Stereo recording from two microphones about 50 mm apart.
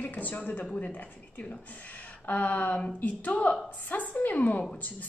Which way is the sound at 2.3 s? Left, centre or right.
Left.